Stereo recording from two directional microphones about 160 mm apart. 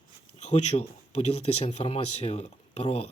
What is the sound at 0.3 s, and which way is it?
Speech, 45° left (ahead or behind).